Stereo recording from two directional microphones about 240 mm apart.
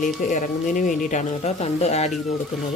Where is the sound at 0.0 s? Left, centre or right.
Left.